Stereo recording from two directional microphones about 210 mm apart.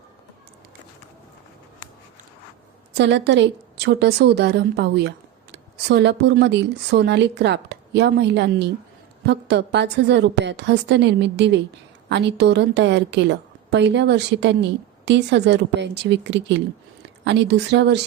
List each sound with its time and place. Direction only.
2.9 s a woman's voice: 55° right (ahead or behind)